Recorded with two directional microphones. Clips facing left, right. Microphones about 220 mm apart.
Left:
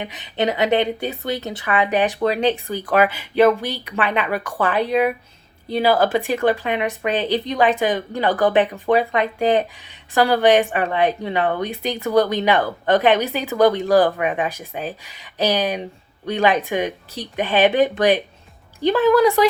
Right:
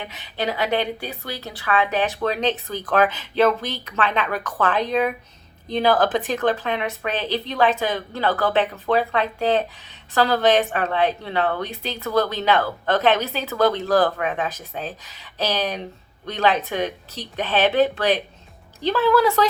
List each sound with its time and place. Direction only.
0.0 s a woman's voice: 15° left (ahead or behind)